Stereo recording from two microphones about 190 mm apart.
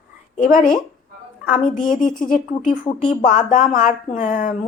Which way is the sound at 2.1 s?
5° left (ahead or behind).